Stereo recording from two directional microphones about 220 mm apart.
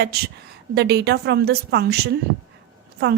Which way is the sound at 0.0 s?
45° right (ahead or behind).